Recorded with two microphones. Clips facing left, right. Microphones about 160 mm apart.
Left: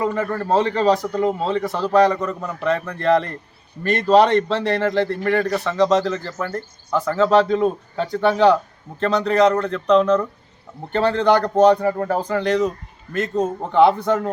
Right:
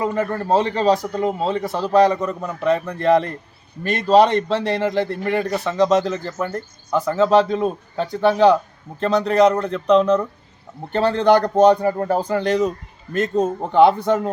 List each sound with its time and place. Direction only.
0.0 s a man's voice: 15° right (ahead or behind)
6.5 s a man's voice: 10° right (ahead or behind)
11.8 s speech: 25° right (ahead or behind)
12.0 s a man's voice: 10° right (ahead or behind)